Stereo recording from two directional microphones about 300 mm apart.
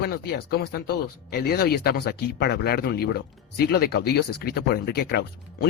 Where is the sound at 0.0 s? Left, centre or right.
Left.